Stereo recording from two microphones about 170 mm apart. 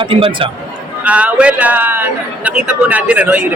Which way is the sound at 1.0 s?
5° right (ahead or behind).